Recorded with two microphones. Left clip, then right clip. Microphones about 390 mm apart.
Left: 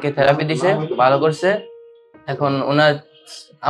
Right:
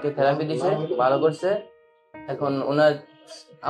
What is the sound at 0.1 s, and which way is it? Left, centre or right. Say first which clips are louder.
Speech: left 7 dB; left.